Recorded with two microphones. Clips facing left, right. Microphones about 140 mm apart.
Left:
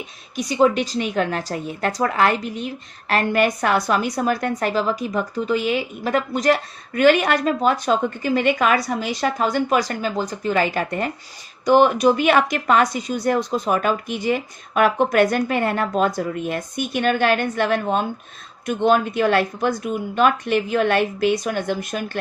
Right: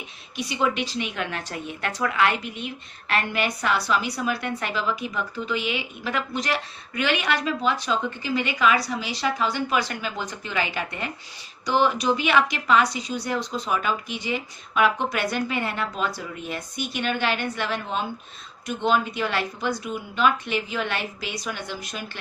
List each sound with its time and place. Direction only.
0.3 s a woman's voice: 40° left (ahead or behind)